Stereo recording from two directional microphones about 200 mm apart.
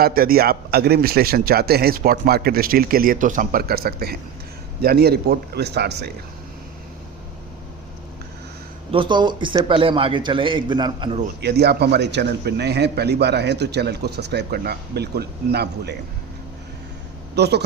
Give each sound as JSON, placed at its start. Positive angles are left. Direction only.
{"t": 0.0, "sound": "a man's voice", "side_deg": -45}
{"t": 8.9, "sound": "a man's voice", "side_deg": -25}
{"t": 11.3, "sound": "a man's voice", "side_deg": -55}
{"t": 17.3, "sound": "a man's voice", "side_deg": -55}